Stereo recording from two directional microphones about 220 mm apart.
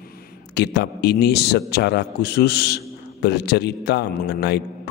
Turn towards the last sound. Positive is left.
turn(degrees=50)  # may be behind; listen again after turning